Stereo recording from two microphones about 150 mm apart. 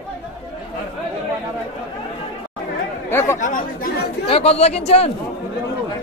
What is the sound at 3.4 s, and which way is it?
Speech, 65° left (ahead or behind).